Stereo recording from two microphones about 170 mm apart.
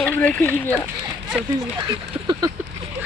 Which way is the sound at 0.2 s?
10° left (ahead or behind).